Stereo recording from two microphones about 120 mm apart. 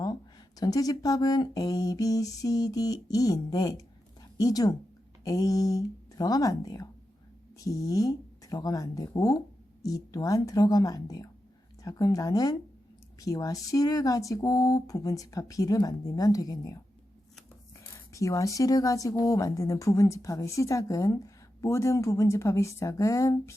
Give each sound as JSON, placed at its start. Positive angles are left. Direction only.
{"t": 0.0, "sound": "speech", "side_deg": 35}
{"t": 17.7, "sound": "speech", "side_deg": 25}